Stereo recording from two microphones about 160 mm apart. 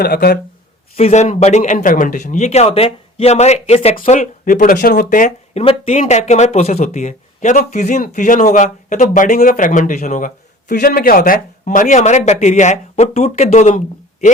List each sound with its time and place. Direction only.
0.0 s speech: 75° left (ahead or behind)
0.9 s speech: 45° left (ahead or behind)
4.2 s speech: 60° left (ahead or behind)
5.6 s speech: 40° left (ahead or behind)